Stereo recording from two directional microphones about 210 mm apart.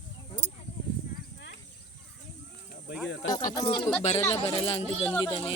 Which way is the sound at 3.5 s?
20° left (ahead or behind).